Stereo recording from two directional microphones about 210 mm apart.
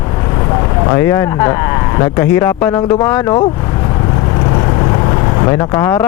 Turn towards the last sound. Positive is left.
turn(degrees=15)  # may be behind; listen again after turning